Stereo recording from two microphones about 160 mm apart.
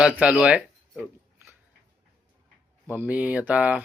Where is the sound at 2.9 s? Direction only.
10° right (ahead or behind).